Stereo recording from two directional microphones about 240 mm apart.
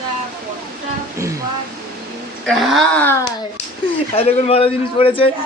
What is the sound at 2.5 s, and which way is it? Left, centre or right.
Speech, centre.